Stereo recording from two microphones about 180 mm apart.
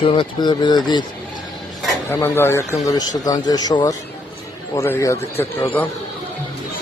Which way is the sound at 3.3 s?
20° left (ahead or behind).